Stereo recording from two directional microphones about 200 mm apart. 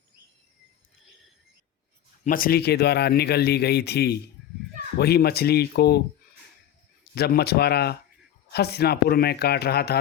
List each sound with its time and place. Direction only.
2.2 s speech: 45° left (ahead or behind)
7.2 s speech: 55° left (ahead or behind)